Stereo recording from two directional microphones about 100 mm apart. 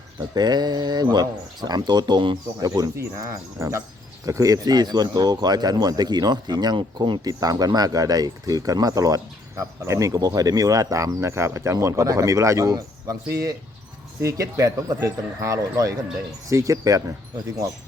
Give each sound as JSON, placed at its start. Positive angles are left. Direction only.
{"t": 0.3, "sound": "speech", "side_deg": -45}
{"t": 2.6, "sound": "speech", "side_deg": -35}
{"t": 7.3, "sound": "speech", "side_deg": -40}